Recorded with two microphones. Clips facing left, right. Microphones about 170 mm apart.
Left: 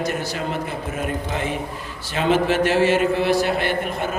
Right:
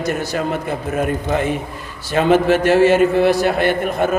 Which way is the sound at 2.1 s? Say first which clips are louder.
Right 5 dB; 50° right (ahead or behind).